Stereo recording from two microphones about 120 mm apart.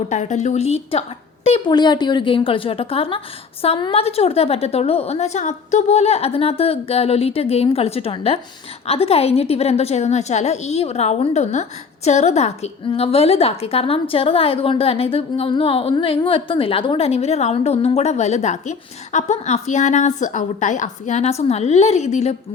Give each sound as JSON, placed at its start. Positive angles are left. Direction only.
{"t": 0.1, "sound": "a woman's voice", "side_deg": 85}
{"t": 1.6, "sound": "a woman's voice", "side_deg": 35}
{"t": 12.9, "sound": "a woman's voice", "side_deg": 55}